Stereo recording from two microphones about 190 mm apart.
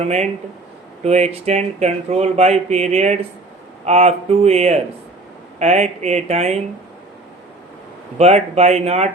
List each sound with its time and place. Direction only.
0.0 s speech: 35° right (ahead or behind)
8.2 s speech: 35° right (ahead or behind)